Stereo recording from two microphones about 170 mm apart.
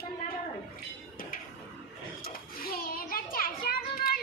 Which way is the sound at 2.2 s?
60° left (ahead or behind).